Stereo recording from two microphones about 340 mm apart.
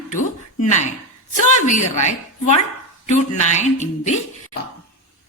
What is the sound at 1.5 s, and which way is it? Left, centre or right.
A woman's voice, left.